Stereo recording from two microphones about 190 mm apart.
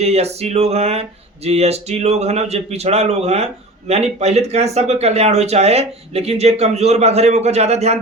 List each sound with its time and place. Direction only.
0.0 s speech: 35° right (ahead or behind)